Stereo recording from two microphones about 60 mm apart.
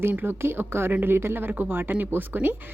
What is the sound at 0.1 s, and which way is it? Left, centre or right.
Speech, right.